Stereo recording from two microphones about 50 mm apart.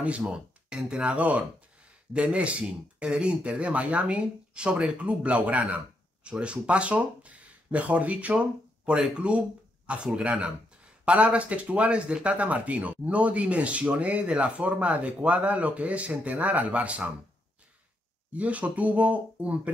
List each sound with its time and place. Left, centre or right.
0.3 s speech: centre
18.3 s speech: right